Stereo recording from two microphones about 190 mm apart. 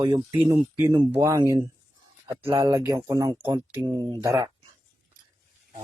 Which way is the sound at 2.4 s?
30° right (ahead or behind).